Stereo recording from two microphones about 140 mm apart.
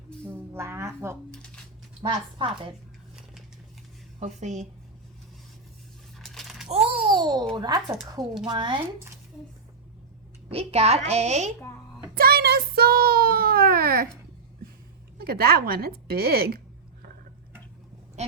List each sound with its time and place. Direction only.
0.3 s speech: 20° right (ahead or behind)
2.0 s a woman's voice: 35° right (ahead or behind)
4.2 s a woman's voice: 55° right (ahead or behind)
6.1 s a sound: centre (ahead or behind)
6.7 s babbling: 40° right (ahead or behind)
7.5 s a woman's voice: 30° right (ahead or behind)
10.5 s a woman's voice: 45° right (ahead or behind)
12.1 s speech: 90° right
15.2 s a woman's voice: 90° right